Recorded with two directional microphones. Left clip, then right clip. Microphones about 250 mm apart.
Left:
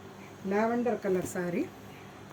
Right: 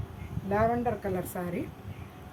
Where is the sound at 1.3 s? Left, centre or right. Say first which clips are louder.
Left 2 dB; right.